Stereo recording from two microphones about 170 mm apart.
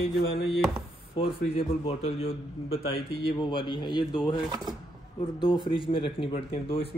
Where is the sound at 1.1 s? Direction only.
35° left (ahead or behind).